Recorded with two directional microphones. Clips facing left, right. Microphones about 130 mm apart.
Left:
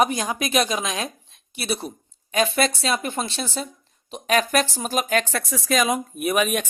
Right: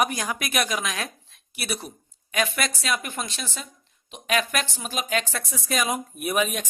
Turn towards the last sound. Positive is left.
turn(degrees=70)  # may be behind; listen again after turning